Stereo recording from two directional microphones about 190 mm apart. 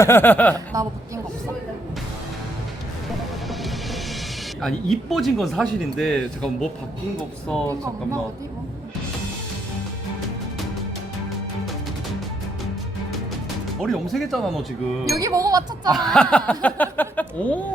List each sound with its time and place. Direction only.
0.0 s speech: 10° left (ahead or behind)
0.5 s speech: 15° right (ahead or behind)
4.6 s speech: centre (ahead or behind)
13.8 s speech: centre (ahead or behind)
15.1 s speech: 15° right (ahead or behind)
15.9 s speech: centre (ahead or behind)